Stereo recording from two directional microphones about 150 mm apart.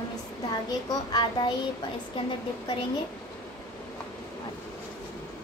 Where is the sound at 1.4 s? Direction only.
30° left (ahead or behind).